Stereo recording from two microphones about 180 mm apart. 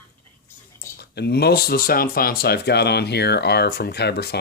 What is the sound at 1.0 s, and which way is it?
Speech, 65° left (ahead or behind).